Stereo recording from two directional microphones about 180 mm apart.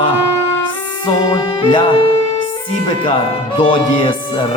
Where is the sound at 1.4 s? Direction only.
25° left (ahead or behind).